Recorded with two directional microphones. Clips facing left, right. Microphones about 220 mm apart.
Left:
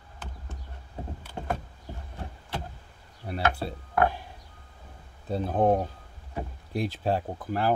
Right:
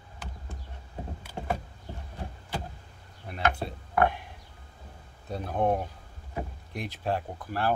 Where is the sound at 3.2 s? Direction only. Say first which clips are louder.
Left 1 dB; 35° left (ahead or behind).